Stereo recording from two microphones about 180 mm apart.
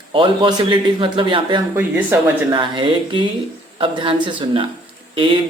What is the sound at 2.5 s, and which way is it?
Speech, 25° right (ahead or behind).